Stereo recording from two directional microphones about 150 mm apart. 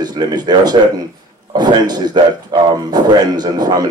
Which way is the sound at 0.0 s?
30° right (ahead or behind).